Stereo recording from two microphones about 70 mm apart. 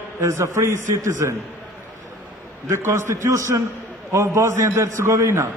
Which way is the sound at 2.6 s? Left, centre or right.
Right.